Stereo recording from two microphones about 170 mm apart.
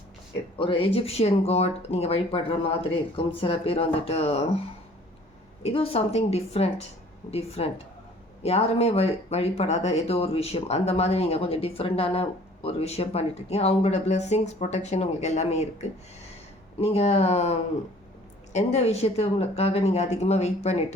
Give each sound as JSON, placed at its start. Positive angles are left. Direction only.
{"t": 0.6, "sound": "speech", "side_deg": 30}
{"t": 5.6, "sound": "speech", "side_deg": 35}